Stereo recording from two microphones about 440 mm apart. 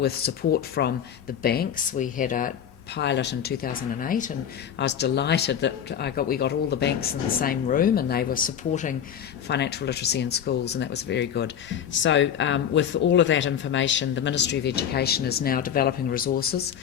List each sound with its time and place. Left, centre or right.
0.0 s speech: left